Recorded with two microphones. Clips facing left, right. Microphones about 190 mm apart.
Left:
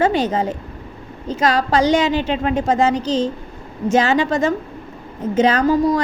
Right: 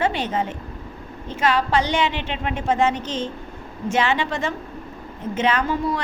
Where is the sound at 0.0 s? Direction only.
40° left (ahead or behind).